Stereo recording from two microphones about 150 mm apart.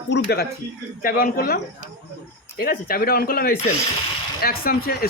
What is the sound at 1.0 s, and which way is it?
Speech, 75° left (ahead or behind).